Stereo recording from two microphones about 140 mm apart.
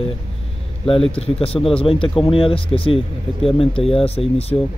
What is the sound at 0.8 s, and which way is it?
A man's voice, 40° left (ahead or behind).